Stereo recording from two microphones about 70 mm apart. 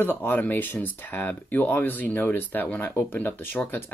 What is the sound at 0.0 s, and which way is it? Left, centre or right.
Speech, left.